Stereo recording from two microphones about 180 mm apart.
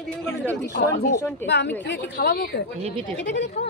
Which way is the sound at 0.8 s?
55° left (ahead or behind).